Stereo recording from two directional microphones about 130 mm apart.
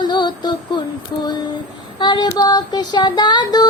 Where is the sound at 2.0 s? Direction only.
30° left (ahead or behind).